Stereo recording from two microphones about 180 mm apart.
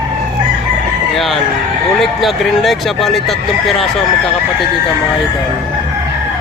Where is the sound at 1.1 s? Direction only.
Centre (ahead or behind).